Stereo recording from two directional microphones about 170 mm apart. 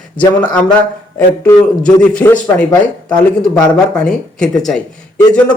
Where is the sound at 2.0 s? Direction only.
5° left (ahead or behind).